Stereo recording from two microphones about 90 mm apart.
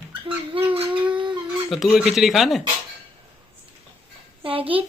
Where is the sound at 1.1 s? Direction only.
65° right (ahead or behind).